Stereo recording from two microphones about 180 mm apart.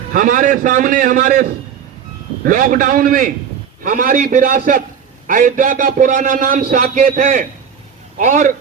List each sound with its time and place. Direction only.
0.1 s a man's voice: 50° right (ahead or behind)